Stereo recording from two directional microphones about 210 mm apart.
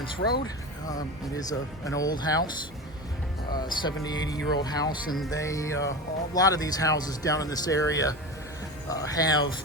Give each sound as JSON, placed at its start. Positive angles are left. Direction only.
{"t": 0.0, "sound": "speech", "side_deg": 50}
{"t": 1.4, "sound": "speech", "side_deg": 15}
{"t": 3.5, "sound": "speech", "side_deg": 20}